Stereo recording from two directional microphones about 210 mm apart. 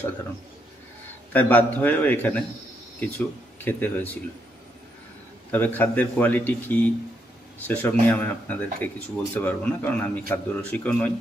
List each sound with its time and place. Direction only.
1.3 s speech: 10° left (ahead or behind)
5.5 s speech: 10° left (ahead or behind)